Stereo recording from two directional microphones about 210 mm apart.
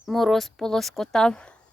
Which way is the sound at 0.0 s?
Centre (ahead or behind).